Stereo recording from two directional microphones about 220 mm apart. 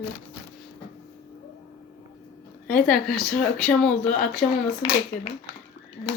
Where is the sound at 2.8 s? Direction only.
5° left (ahead or behind).